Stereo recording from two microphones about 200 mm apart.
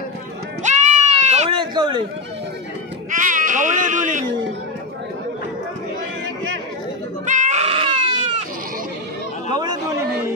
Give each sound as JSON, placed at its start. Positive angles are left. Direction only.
{"t": 0.7, "sound": "goat", "side_deg": -35}
{"t": 3.1, "sound": "sheep", "side_deg": -40}
{"t": 7.2, "sound": "goat", "side_deg": -35}
{"t": 9.5, "sound": "chatter", "side_deg": -20}